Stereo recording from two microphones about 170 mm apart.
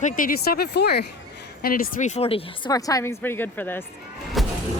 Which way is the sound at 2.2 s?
35° left (ahead or behind).